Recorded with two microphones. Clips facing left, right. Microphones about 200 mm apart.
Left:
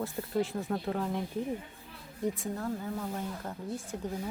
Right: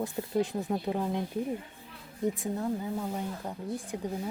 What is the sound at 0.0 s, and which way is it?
Speech, 15° right (ahead or behind).